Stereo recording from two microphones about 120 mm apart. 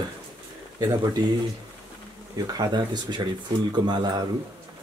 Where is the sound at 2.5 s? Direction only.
35° right (ahead or behind).